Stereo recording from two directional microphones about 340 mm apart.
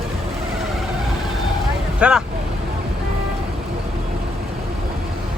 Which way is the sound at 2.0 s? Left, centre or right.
Centre.